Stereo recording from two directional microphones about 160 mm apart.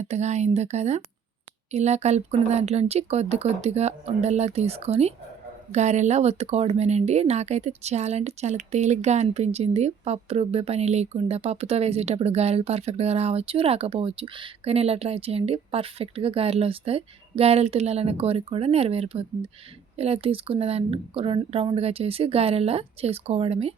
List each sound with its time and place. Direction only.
0.0 s speech: 45° right (ahead or behind)